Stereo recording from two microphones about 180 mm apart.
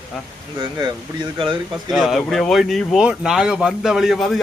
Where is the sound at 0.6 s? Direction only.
25° right (ahead or behind).